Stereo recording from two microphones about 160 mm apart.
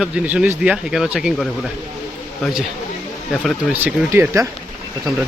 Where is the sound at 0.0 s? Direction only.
5° right (ahead or behind).